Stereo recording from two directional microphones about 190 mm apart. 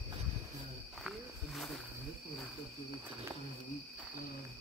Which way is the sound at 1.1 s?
Centre (ahead or behind).